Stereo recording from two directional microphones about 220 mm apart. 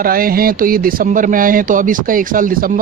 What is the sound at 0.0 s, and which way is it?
Speech, 40° right (ahead or behind).